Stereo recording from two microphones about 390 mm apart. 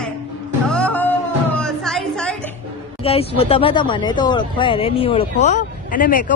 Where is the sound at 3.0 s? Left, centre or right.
Centre.